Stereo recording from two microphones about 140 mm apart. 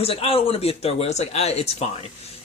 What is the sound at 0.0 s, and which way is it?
Speech, 45° left (ahead or behind).